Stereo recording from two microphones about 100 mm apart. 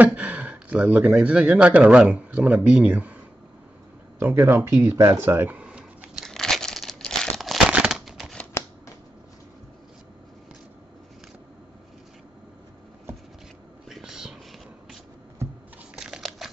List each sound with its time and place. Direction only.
0.0 s speech: 15° right (ahead or behind)
4.2 s speech: 20° right (ahead or behind)
6.2 s crumpling: 5° left (ahead or behind)
13.8 s whispering: 5° right (ahead or behind)
16.0 s crumpling: 5° right (ahead or behind)